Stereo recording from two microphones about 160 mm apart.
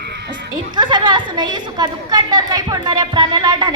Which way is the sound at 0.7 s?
30° right (ahead or behind).